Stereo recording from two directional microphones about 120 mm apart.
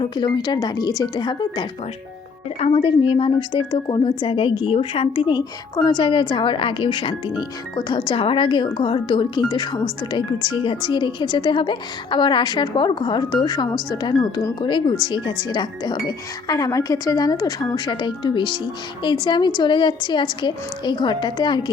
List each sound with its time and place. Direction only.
0.0 s a woman's voice: 40° left (ahead or behind)
2.6 s speech: 55° left (ahead or behind)
5.4 s a woman's voice: 35° left (ahead or behind)